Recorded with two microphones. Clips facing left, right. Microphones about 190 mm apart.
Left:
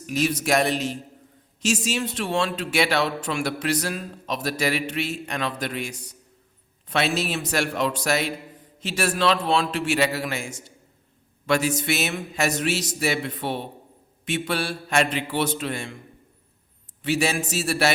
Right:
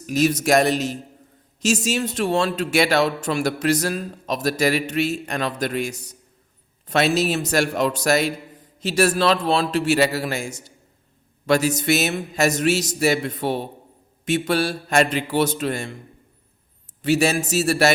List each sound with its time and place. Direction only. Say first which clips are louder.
0.1 s a man's voice: right 5 dB; 40° right (ahead or behind)
17.0 s speech: right 5 dB; 40° right (ahead or behind)